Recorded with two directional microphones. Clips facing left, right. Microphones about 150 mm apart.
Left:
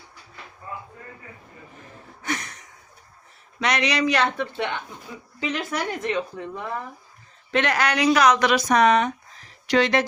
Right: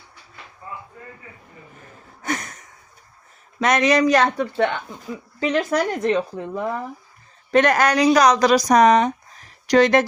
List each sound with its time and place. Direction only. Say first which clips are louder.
2.2 s a sound: right 3 dB; 45° right (ahead or behind)
3.6 s speech: right 6 dB; 45° right (ahead or behind)
7.5 s speech: right 6 dB; 45° right (ahead or behind)